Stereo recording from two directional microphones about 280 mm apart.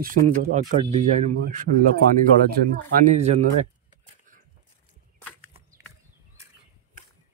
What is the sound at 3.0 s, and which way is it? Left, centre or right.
Speech, right.